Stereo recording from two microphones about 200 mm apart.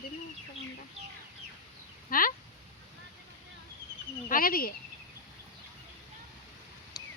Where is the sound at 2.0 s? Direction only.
45° left (ahead or behind).